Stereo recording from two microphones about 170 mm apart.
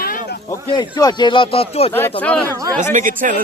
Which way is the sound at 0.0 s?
60° left (ahead or behind).